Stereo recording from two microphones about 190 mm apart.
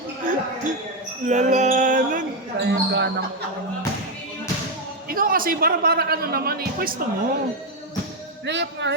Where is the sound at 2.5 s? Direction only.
70° right (ahead or behind).